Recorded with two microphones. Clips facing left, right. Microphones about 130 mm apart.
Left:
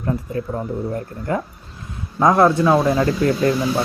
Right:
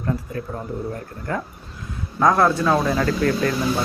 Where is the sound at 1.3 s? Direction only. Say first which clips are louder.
Left 4 dB; 20° left (ahead or behind).